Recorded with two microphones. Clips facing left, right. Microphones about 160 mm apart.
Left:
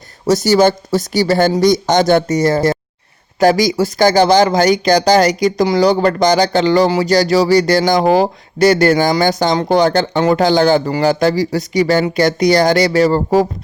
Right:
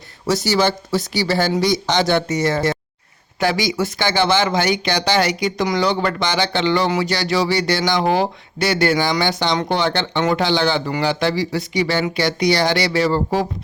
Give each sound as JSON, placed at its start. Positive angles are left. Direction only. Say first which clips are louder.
{"t": 0.3, "sound": "speech", "louder": "left 7 dB", "side_deg": 45}